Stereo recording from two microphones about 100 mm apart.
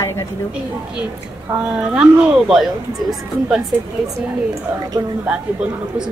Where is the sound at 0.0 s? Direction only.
25° left (ahead or behind).